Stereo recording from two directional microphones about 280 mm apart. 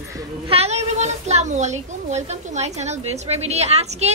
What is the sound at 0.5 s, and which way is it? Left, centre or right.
A child's voice, right.